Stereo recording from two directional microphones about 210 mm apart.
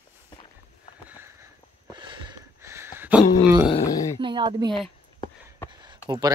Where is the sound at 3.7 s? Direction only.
20° left (ahead or behind).